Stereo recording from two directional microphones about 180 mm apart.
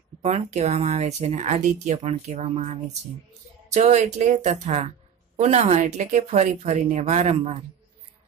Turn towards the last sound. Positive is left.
turn(degrees=-35)  # may be behind; listen again after turning